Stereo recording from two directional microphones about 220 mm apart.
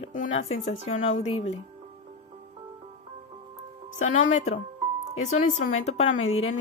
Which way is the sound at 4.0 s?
35° left (ahead or behind).